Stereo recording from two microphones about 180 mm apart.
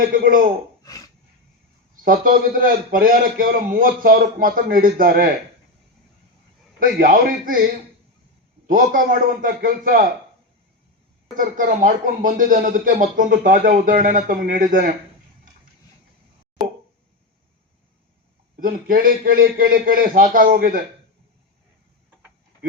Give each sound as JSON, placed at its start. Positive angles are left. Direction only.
{"t": 0.1, "sound": "a man's voice", "side_deg": -50}
{"t": 0.9, "sound": "a sound", "side_deg": 20}
{"t": 2.0, "sound": "a man's voice", "side_deg": -50}
{"t": 7.0, "sound": "a man's voice", "side_deg": -50}
{"t": 11.3, "sound": "a man's voice", "side_deg": -50}
{"t": 18.6, "sound": "a man's voice", "side_deg": -50}